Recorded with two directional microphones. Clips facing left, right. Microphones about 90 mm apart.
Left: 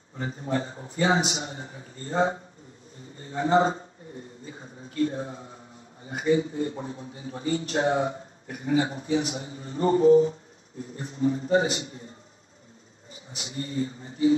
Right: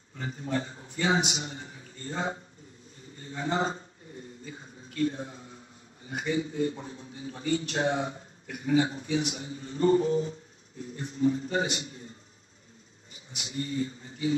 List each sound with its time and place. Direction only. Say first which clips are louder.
0.1 s a man's voice: left 3 dB; 30° left (ahead or behind)
3.0 s a sound: left 7 dB; 35° left (ahead or behind)
4.5 s a man's voice: left 3 dB; 30° left (ahead or behind)
13.1 s speech: left 1 dB; 35° left (ahead or behind)